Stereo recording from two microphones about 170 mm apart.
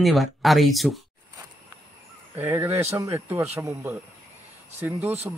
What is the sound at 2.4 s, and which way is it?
Speech, 10° right (ahead or behind).